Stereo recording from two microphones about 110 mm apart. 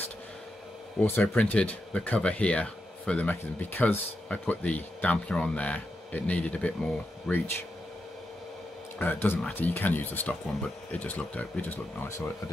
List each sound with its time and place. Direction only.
1.0 s speech: 15° left (ahead or behind)
7.3 s speech: centre (ahead or behind)
8.9 s speech: 15° left (ahead or behind)